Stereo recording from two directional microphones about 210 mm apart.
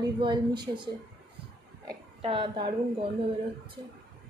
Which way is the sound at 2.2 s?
25° right (ahead or behind).